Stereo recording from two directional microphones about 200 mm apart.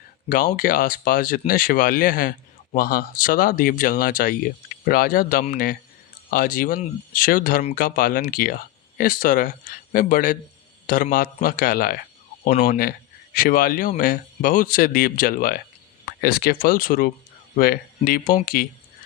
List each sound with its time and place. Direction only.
0.3 s speech: 45° left (ahead or behind)